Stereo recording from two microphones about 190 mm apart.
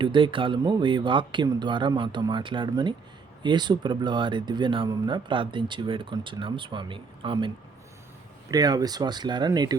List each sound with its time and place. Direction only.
0.0 s speech: 25° right (ahead or behind)